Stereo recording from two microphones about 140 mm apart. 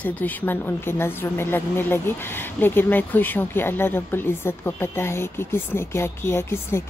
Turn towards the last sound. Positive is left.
turn(degrees=20)  # may be behind; listen again after turning